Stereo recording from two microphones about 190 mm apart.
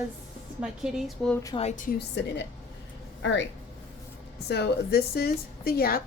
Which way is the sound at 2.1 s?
60° left (ahead or behind).